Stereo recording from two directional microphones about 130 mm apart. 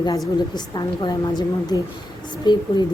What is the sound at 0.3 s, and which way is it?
Speech, 35° left (ahead or behind).